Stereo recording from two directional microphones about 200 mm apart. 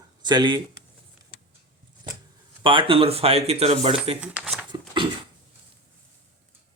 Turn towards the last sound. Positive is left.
turn(degrees=-25)  # may be behind; listen again after turning